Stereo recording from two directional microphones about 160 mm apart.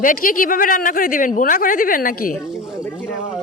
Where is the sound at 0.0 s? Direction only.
60° left (ahead or behind).